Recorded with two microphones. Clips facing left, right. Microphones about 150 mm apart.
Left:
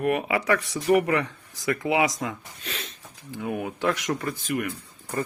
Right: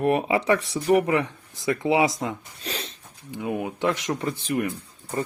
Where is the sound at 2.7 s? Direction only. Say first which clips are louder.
Right 4 dB; 35° right (ahead or behind).